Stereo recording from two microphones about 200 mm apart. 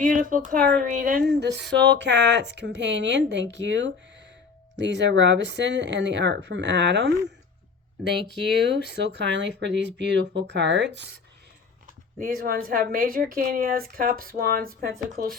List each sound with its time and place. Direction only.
0.0 s a woman's voice: 45° right (ahead or behind); by 7.1 s 60° right (ahead or behind)
9.0 s speech: 60° right (ahead or behind)
12.4 s a woman's voice: 45° right (ahead or behind)